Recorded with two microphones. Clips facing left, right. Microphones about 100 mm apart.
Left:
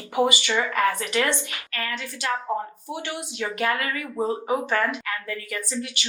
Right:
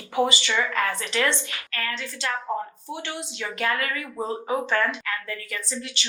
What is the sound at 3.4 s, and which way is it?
Speech, 25° left (ahead or behind).